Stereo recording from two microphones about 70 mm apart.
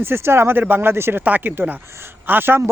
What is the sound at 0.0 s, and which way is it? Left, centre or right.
Speech, right.